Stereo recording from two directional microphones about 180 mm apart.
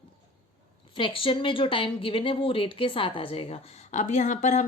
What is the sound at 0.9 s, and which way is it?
Speech, 30° left (ahead or behind).